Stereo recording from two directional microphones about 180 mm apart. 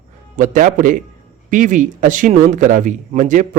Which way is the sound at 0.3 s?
45° right (ahead or behind).